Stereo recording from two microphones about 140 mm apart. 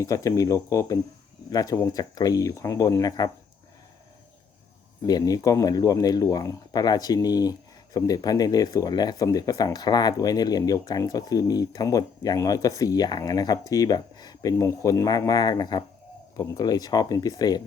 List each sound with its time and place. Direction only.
0.0 s speech: 25° left (ahead or behind)
5.0 s speech: 25° left (ahead or behind)